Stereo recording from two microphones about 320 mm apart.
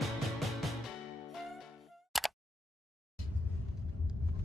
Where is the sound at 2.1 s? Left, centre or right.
Centre.